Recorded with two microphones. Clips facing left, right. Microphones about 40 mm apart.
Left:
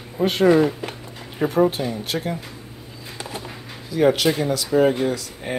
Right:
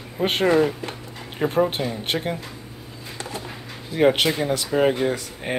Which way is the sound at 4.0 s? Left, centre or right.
Right.